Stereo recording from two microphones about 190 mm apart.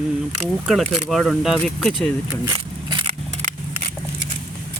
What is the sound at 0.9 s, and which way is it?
Speech, centre (ahead or behind).